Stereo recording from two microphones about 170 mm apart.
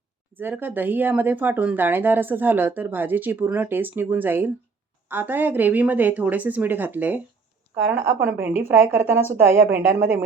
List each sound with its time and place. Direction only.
0.3 s speech: 10° right (ahead or behind)